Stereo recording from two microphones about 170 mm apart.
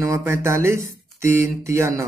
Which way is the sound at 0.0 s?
15° right (ahead or behind).